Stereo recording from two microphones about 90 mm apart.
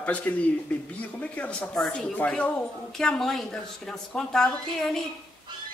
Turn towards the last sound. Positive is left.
turn(degrees=5)  # may be behind; listen again after turning